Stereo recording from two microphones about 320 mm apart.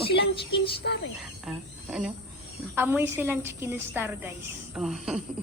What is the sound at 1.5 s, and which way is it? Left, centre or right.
A woman's voice, centre.